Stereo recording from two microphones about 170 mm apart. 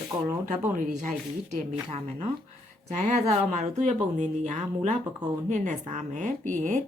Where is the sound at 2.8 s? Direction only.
45° right (ahead or behind).